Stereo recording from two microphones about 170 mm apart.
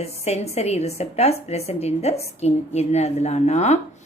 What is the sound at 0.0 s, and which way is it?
A woman's voice, 40° left (ahead or behind).